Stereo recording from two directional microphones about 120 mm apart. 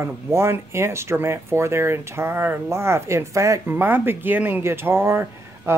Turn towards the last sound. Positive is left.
turn(degrees=-20)  # may be behind; listen again after turning